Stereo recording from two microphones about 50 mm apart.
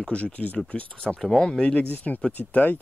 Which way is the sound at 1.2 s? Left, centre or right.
Centre.